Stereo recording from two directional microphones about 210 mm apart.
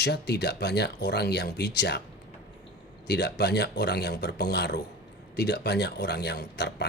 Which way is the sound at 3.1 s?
50° left (ahead or behind).